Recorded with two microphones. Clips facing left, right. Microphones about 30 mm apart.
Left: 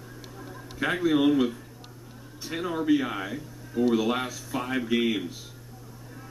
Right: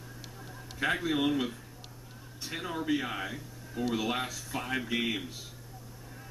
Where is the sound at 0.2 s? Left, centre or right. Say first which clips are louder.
Left 6 dB; centre.